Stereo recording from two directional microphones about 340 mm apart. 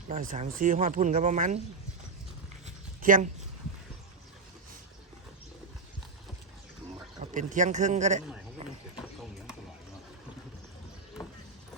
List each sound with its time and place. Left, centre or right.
0.1 s speech: right
2.6 s a sound: right
7.2 s speech: right